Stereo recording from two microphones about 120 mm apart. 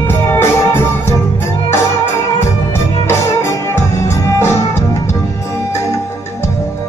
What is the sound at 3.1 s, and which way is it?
Music, 20° left (ahead or behind).